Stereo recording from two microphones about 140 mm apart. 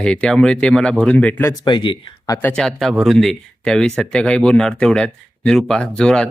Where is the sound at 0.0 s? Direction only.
5° left (ahead or behind).